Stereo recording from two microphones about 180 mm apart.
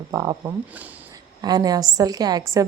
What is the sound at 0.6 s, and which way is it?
Speech, 10° right (ahead or behind).